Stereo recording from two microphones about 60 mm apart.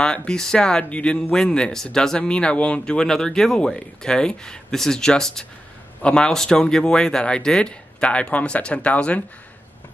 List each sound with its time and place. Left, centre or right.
0.0 s speech: centre